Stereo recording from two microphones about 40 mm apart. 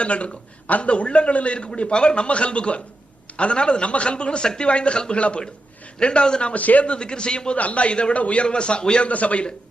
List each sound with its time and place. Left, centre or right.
0.0 s a woman's voice: left
6.5 s a man's voice: left
6.8 s a man's voice: left